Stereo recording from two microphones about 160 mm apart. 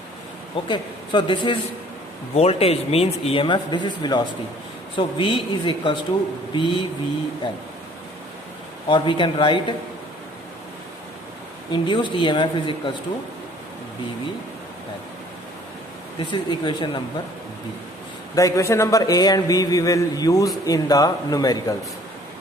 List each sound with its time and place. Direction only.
0.5 s speech: 30° left (ahead or behind)
8.9 s speech: 30° left (ahead or behind)
11.7 s a man's voice: 30° left (ahead or behind)
16.1 s a man's voice: 30° left (ahead or behind)
18.3 s a man's voice: 20° left (ahead or behind)